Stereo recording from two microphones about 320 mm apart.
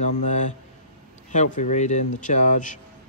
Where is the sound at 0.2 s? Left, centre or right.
Left.